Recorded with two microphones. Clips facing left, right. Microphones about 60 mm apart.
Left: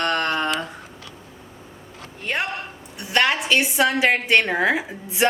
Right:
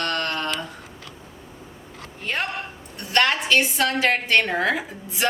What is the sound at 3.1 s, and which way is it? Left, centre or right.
A woman's voice, centre.